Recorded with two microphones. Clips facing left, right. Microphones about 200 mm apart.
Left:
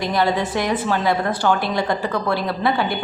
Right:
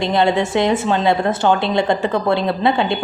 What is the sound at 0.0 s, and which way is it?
A woman's voice, 25° right (ahead or behind).